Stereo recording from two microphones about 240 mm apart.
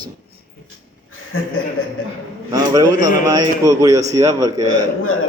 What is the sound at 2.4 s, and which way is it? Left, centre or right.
A man's voice, centre.